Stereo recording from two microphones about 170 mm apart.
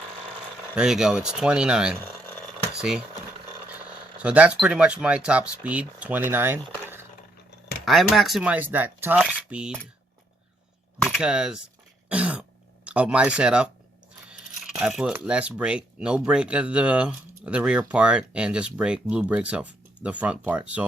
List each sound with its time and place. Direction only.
0.8 s speech: 5° right (ahead or behind)
4.2 s speech: 5° right (ahead or behind)
7.9 s speech: centre (ahead or behind)
11.0 s speech: 5° right (ahead or behind)
12.0 s throat clearing: 5° right (ahead or behind)
14.3 s speech: 5° right (ahead or behind)